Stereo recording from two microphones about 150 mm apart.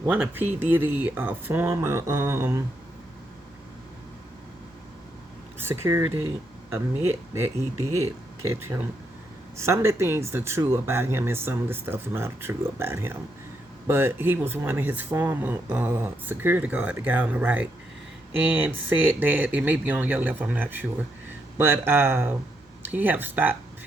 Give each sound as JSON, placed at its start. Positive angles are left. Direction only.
{"t": 0.0, "sound": "speech", "side_deg": -15}
{"t": 5.5, "sound": "speech", "side_deg": -15}